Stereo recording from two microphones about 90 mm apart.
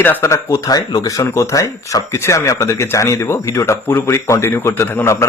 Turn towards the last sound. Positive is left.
turn(degrees=30)  # may be behind; listen again after turning